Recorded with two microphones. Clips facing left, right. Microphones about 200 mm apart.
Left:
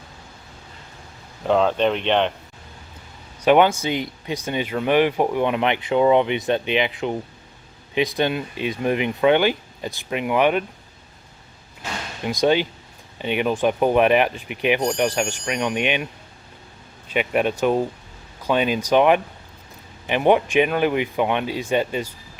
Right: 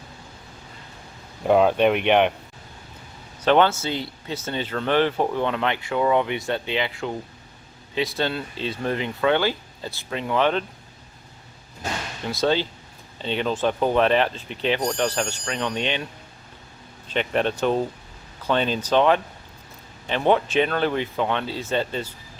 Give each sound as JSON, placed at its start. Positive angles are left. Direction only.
{"t": 1.5, "sound": "speech", "side_deg": -10}
{"t": 3.4, "sound": "speech", "side_deg": 15}
{"t": 12.2, "sound": "speech", "side_deg": 15}
{"t": 17.1, "sound": "speech", "side_deg": 10}